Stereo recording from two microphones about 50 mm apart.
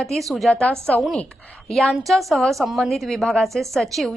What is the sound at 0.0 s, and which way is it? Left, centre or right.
Speech, centre.